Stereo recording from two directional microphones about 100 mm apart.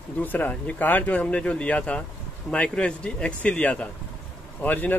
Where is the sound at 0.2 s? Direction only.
15° left (ahead or behind).